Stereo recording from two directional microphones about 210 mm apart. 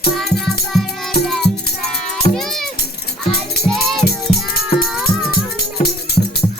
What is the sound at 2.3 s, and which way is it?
Music, 35° left (ahead or behind).